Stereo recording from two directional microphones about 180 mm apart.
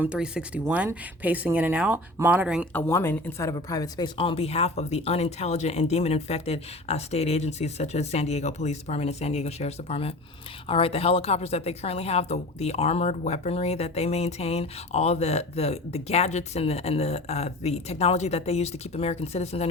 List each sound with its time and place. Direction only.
0.0 s speech: 5° right (ahead or behind)
2.7 s a woman's voice: 15° left (ahead or behind); by 19.6 s 35° left (ahead or behind)